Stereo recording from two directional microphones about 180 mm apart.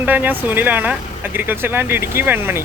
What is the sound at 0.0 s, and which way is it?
Speech, 10° right (ahead or behind).